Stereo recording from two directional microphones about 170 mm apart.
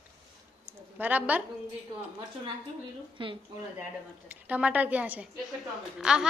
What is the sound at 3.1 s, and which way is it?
Speech, 30° right (ahead or behind).